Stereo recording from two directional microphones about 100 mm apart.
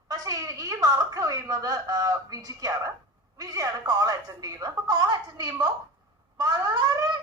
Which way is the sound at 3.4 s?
35° right (ahead or behind).